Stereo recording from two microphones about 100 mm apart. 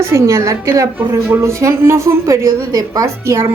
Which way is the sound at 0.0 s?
30° right (ahead or behind).